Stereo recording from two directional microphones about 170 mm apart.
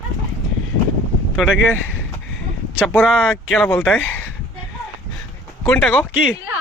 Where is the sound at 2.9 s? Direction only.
5° left (ahead or behind).